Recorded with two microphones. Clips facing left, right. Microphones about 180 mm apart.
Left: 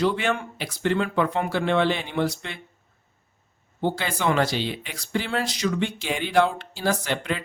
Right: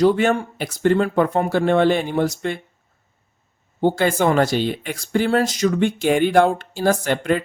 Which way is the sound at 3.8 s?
50° right (ahead or behind).